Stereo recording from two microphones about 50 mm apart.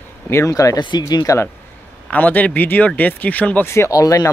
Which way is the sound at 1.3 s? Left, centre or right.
Left.